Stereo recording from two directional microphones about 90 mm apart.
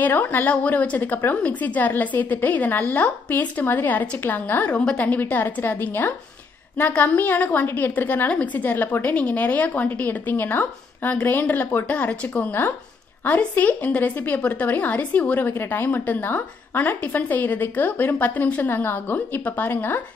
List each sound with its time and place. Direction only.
0.0 s a woman's voice: 20° left (ahead or behind)